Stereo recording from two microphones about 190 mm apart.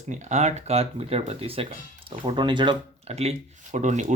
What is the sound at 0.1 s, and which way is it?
Speech, 35° right (ahead or behind).